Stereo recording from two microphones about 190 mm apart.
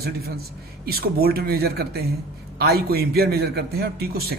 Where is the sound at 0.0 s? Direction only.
55° right (ahead or behind).